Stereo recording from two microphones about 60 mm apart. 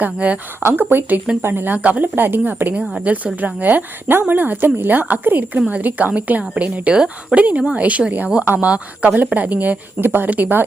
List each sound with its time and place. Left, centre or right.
0.0 s a woman's voice: right
0.6 s a woman's voice: right; by 7.3 s centre
7.3 s a woman's voice: right